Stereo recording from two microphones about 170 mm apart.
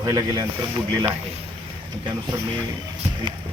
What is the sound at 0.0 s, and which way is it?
Speech, 25° right (ahead or behind).